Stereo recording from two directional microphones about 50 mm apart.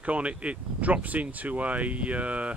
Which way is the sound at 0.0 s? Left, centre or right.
Right.